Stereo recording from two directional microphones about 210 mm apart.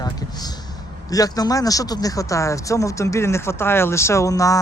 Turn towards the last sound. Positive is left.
turn(degrees=15)  # may be behind; listen again after turning